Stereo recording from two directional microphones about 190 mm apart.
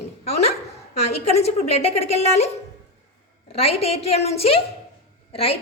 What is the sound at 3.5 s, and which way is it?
A woman's voice, 30° left (ahead or behind).